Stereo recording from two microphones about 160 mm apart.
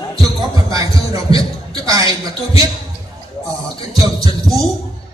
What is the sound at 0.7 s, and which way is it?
Speech, 25° right (ahead or behind).